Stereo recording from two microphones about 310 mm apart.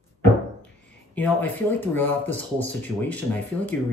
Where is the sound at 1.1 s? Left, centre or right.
Centre.